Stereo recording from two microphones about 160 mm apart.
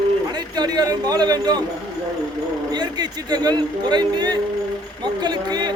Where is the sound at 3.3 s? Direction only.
25° right (ahead or behind).